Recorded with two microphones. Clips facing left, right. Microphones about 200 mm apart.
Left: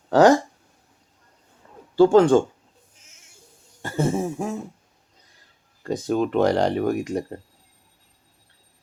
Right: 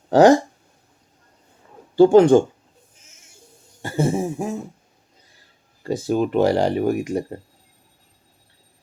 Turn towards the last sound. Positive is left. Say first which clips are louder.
# right 2 dB
turn(degrees=-10)  # may be behind; listen again after turning